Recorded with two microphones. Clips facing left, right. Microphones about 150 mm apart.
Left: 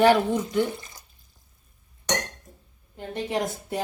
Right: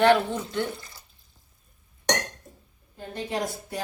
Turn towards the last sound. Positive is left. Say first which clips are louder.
# left 2 dB
turn(degrees=20)  # may be behind; listen again after turning